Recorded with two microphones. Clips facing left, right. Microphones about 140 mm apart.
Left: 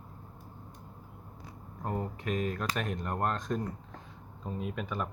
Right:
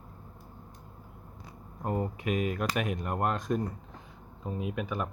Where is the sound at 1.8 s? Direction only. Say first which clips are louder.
Right 3 dB; 10° right (ahead or behind).